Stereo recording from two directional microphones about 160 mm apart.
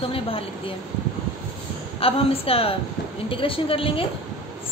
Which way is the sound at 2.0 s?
35° left (ahead or behind).